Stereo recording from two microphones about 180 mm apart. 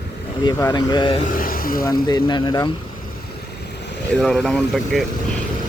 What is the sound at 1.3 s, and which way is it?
Speech, 50° left (ahead or behind).